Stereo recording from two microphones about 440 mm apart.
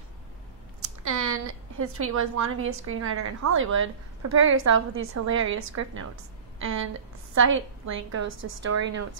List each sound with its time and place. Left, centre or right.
0.8 s a woman's voice: right
7.3 s a woman's voice: right